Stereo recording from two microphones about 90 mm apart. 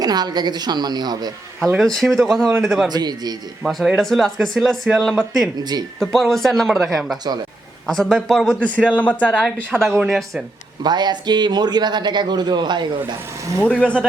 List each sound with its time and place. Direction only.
0.0 s a man's voice: 50° right (ahead or behind)
1.8 s speech: centre (ahead or behind)
2.9 s a man's voice: 50° right (ahead or behind)
3.6 s speech: centre (ahead or behind)
5.5 s a man's voice: 50° right (ahead or behind)
6.0 s a man's voice: 5° left (ahead or behind)
10.8 s a man's voice: 55° right (ahead or behind)
13.6 s a man's voice: 15° left (ahead or behind)